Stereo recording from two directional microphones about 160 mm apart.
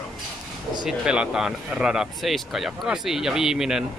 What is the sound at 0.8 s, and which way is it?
Speech, 5° right (ahead or behind).